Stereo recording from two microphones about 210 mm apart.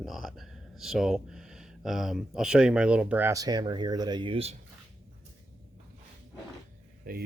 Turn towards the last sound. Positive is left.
turn(degrees=-45)  # may be behind; listen again after turning